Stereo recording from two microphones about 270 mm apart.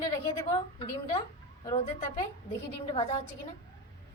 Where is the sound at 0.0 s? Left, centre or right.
Centre.